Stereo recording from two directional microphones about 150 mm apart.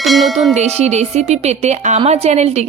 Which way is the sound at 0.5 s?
45° right (ahead or behind).